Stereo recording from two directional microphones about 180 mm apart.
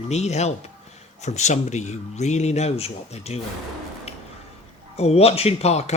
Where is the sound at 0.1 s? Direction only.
40° left (ahead or behind).